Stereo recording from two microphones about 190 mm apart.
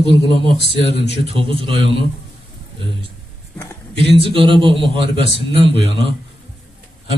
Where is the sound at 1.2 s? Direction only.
30° right (ahead or behind).